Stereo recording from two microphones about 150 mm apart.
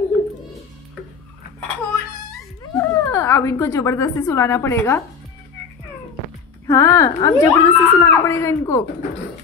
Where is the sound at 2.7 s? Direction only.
20° left (ahead or behind).